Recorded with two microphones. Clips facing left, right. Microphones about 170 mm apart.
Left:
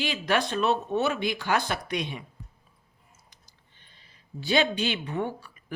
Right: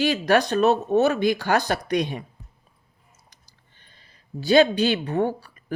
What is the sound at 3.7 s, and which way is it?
Speech, 45° right (ahead or behind).